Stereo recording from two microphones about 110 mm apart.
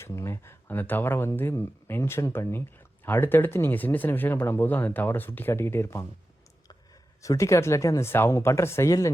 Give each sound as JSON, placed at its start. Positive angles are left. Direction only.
{"t": 0.0, "sound": "speech", "side_deg": 25}
{"t": 7.2, "sound": "speech", "side_deg": 30}